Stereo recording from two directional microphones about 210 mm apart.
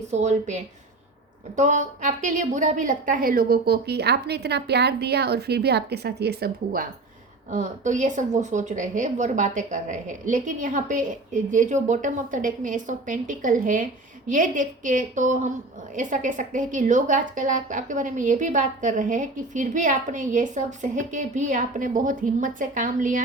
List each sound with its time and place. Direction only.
0.1 s a woman's voice: 35° right (ahead or behind); by 6.8 s 50° right (ahead or behind)
7.5 s a woman's voice: 35° right (ahead or behind)